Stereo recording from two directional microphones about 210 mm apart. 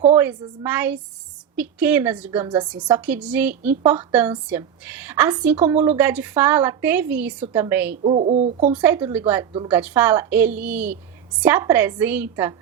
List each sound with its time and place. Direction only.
0.3 s a woman's voice: 10° right (ahead or behind)
8.0 s speech: 30° right (ahead or behind)
8.7 s a woman's voice: 10° right (ahead or behind)
9.5 s a woman's voice: 25° right (ahead or behind)
9.7 s a woman's voice: 10° right (ahead or behind)